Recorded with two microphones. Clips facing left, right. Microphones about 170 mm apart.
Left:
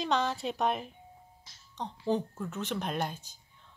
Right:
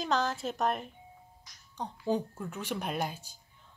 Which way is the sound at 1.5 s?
25° left (ahead or behind).